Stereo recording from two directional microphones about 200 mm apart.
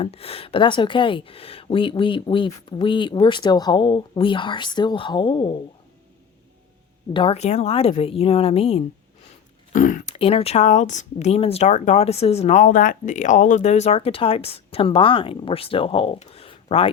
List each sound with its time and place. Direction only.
0.0 s speech: 30° left (ahead or behind)
7.1 s speech: 25° left (ahead or behind)
9.7 s speech: 40° left (ahead or behind)
10.2 s speech: 30° left (ahead or behind)